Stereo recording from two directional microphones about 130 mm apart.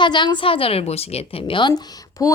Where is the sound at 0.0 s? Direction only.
35° left (ahead or behind).